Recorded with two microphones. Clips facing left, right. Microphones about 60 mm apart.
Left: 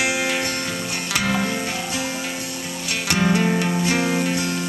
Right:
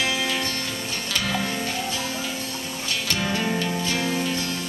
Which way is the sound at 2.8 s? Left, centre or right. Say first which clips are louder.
Left 4 dB; left.